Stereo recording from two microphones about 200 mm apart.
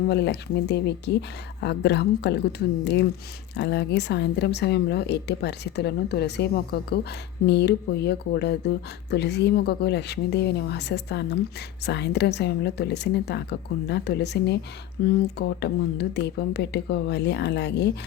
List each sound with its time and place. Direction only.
0.1 s speech: 55° left (ahead or behind)